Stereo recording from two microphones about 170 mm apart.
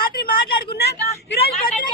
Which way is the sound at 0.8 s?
70° left (ahead or behind).